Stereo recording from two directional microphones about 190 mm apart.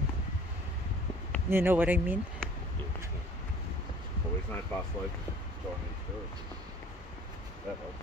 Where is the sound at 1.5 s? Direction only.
10° right (ahead or behind).